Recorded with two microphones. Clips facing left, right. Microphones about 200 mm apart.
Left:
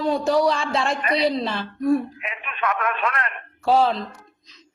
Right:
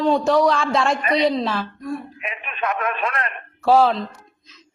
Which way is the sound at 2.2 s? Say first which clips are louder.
Right 1 dB; 25° right (ahead or behind).